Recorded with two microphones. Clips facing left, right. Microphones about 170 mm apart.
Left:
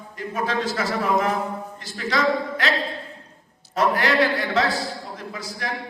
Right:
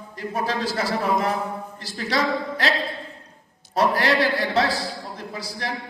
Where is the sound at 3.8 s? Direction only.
35° right (ahead or behind).